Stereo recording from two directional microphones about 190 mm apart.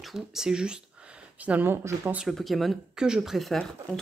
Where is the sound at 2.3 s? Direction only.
Centre (ahead or behind).